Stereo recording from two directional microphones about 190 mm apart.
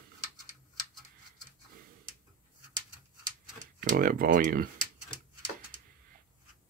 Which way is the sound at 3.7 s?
50° right (ahead or behind).